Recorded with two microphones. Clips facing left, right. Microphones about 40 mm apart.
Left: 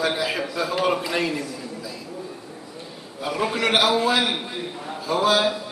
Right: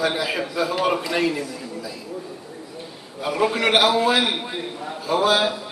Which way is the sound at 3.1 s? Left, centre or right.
Centre.